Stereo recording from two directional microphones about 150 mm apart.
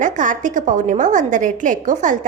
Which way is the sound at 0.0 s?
55° right (ahead or behind).